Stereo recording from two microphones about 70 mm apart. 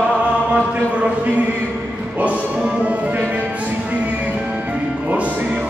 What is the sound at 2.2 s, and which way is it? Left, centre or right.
Music, centre.